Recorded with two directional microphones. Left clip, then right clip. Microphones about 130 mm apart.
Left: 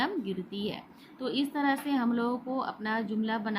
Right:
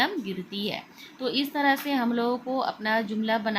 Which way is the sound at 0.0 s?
35° right (ahead or behind).